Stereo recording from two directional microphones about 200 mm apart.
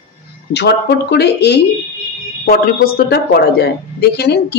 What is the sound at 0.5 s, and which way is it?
A woman's voice, 55° left (ahead or behind).